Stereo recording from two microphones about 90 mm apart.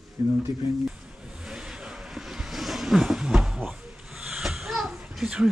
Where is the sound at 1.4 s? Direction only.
5° right (ahead or behind).